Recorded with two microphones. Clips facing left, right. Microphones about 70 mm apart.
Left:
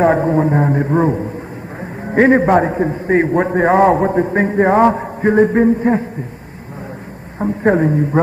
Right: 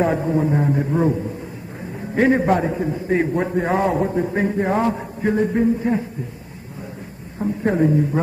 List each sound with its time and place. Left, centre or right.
0.0 s a man's voice: left
7.3 s a man's voice: left